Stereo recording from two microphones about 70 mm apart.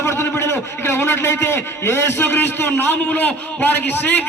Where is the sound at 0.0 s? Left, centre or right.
Left.